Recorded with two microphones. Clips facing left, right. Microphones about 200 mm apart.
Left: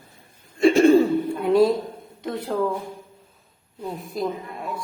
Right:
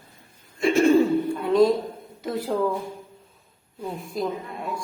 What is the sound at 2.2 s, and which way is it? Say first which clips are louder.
Speech: right 1 dB; 5° right (ahead or behind).